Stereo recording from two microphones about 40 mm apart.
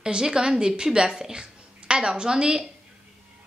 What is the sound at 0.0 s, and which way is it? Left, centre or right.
A woman's voice, centre.